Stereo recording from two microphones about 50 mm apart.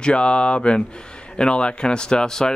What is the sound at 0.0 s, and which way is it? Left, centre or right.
Speech, left.